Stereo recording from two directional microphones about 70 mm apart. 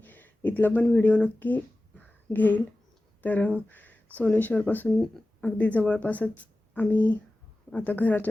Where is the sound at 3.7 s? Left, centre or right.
Left.